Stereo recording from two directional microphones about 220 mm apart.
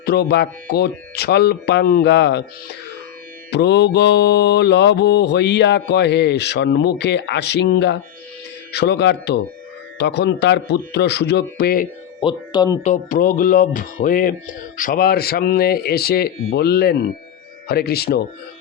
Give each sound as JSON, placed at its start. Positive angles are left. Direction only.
{"t": 0.0, "sound": "mantra", "side_deg": 45}
{"t": 3.5, "sound": "mantra", "side_deg": 50}
{"t": 12.2, "sound": "speech", "side_deg": 20}
{"t": 12.8, "sound": "speech", "side_deg": 35}
{"t": 14.8, "sound": "mantra", "side_deg": 40}